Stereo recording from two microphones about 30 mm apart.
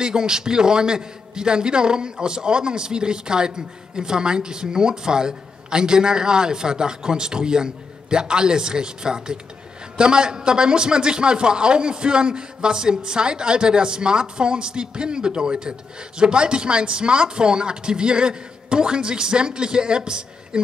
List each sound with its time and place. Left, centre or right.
0.0 s a man's voice: right